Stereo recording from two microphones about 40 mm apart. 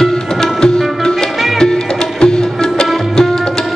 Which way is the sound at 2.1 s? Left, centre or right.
Centre.